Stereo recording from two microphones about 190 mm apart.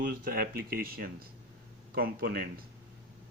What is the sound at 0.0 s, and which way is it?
Speech, 50° right (ahead or behind).